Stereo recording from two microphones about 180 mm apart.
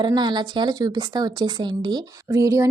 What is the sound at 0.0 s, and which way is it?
Speech, 25° right (ahead or behind).